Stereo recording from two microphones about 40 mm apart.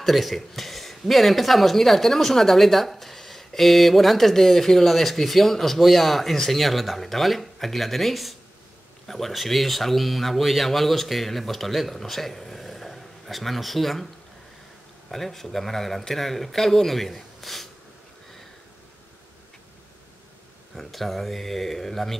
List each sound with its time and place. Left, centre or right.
0.0 s speech: centre
15.0 s speech: centre
20.7 s speech: centre